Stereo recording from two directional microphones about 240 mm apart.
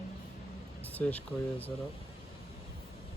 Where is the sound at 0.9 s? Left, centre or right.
Centre.